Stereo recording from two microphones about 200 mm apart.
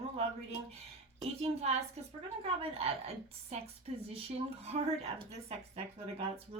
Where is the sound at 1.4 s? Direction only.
30° right (ahead or behind).